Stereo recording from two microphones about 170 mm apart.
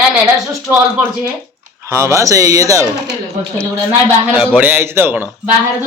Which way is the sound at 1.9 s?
15° right (ahead or behind).